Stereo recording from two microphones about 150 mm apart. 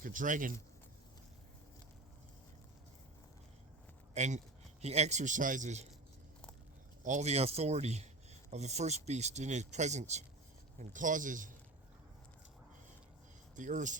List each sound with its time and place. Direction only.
0.0 s a man's voice: 60° right (ahead or behind)
4.1 s speech: 50° right (ahead or behind)
7.0 s speech: 50° right (ahead or behind)
10.8 s a man's voice: 60° right (ahead or behind)
13.6 s a man's voice: 55° right (ahead or behind)